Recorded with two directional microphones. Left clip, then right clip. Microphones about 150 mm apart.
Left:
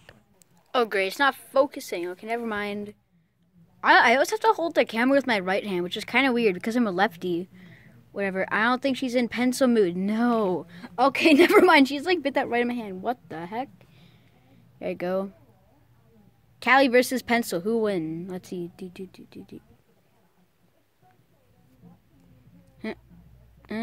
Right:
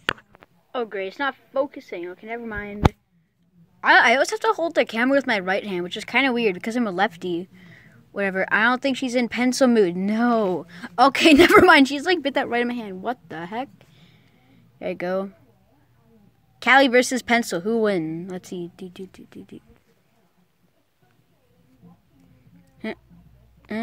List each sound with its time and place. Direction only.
0.7 s a woman's voice: 15° left (ahead or behind)
3.8 s speech: centre (ahead or behind)
7.7 s a woman's voice: 15° right (ahead or behind)
11.0 s a woman's voice: 30° right (ahead or behind); by 15.3 s 5° right (ahead or behind)
16.5 s a woman's voice: 15° right (ahead or behind)
17.8 s speech: 25° right (ahead or behind)
18.1 s a woman's voice: 10° right (ahead or behind)
22.8 s a woman's voice: 10° right (ahead or behind)